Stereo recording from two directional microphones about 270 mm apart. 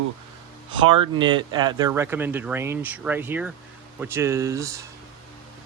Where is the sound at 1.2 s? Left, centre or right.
Centre.